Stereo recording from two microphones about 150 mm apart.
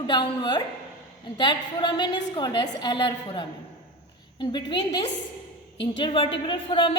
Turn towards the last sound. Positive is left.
turn(degrees=35)  # may be behind; listen again after turning